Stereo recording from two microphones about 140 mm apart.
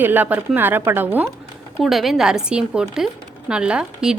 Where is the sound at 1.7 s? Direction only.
Centre (ahead or behind).